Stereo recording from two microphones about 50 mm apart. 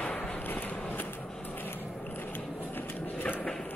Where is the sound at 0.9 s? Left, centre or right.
Left.